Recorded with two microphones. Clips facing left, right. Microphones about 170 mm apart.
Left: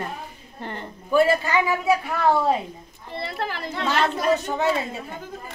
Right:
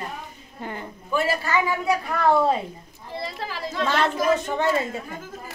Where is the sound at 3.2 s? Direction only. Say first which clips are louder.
Left 3 dB; 60° left (ahead or behind).